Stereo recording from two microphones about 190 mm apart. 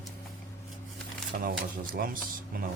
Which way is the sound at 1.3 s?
50° right (ahead or behind).